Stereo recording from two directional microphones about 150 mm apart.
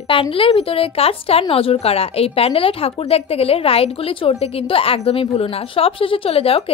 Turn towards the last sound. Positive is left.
turn(degrees=40)  # may be behind; listen again after turning